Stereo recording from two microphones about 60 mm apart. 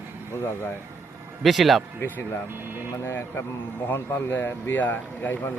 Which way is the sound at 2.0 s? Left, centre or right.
Left.